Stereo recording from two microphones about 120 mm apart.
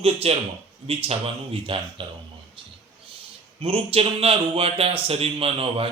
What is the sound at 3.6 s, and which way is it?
Speech, 50° right (ahead or behind).